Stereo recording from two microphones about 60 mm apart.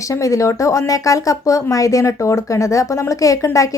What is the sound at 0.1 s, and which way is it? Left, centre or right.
Speech, left.